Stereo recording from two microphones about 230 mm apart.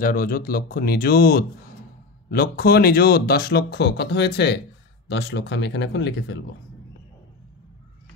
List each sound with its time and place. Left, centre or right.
0.0 s speech: left